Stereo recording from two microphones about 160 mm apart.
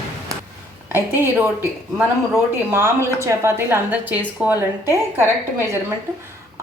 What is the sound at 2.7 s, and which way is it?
A woman's voice, 15° right (ahead or behind).